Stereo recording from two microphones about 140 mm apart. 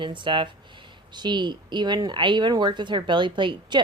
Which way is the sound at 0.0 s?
35° right (ahead or behind).